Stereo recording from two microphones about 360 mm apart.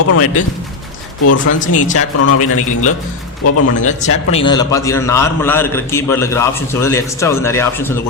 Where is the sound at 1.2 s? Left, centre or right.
Left.